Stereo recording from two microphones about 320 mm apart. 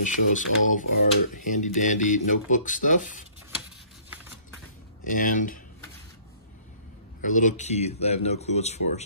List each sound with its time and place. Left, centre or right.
0.0 s speech: left
5.0 s speech: left
7.2 s speech: left